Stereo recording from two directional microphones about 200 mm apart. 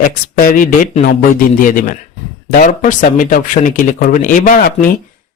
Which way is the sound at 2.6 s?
40° left (ahead or behind).